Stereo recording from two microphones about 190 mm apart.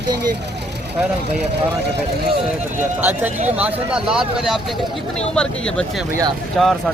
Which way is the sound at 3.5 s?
5° right (ahead or behind).